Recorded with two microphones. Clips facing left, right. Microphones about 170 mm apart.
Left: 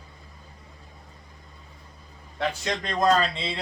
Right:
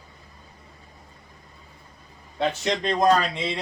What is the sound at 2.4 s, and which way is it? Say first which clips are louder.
Speech: right 4 dB; 20° right (ahead or behind).